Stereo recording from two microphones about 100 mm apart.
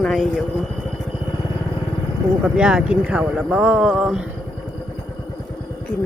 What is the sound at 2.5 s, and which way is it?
Speech, 10° right (ahead or behind).